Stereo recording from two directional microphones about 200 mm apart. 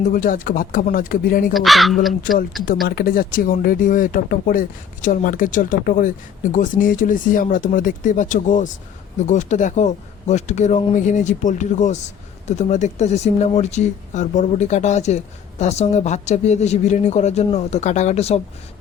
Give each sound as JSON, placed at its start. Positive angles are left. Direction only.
{"t": 0.1, "sound": "speech", "side_deg": 40}
{"t": 1.5, "sound": "speech", "side_deg": 0}
{"t": 2.8, "sound": "speech", "side_deg": 45}